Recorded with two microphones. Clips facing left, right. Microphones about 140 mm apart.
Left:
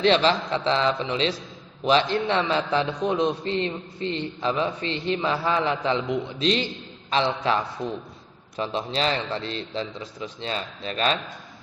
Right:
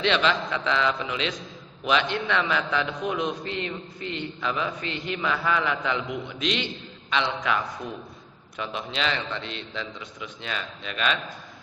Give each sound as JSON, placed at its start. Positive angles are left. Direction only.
{"t": 0.0, "sound": "a man's voice", "side_deg": 35}